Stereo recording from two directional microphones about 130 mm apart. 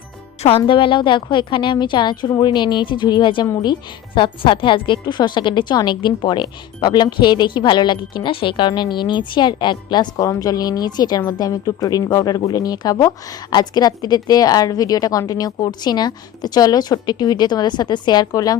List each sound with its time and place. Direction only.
0.4 s speech: 45° left (ahead or behind); by 18.5 s 30° left (ahead or behind)